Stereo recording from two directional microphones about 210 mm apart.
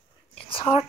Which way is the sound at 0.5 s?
30° left (ahead or behind).